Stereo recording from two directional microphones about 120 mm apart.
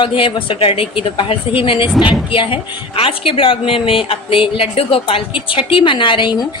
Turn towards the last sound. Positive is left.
turn(degrees=40)  # may be behind; listen again after turning